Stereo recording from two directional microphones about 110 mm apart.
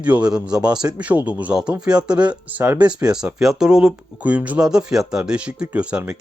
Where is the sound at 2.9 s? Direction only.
10° right (ahead or behind).